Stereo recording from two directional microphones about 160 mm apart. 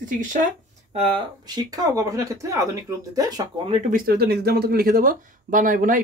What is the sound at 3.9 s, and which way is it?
Speech, 70° right (ahead or behind).